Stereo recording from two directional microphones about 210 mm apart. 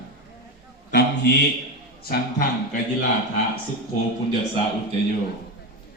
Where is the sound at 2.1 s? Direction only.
45° left (ahead or behind).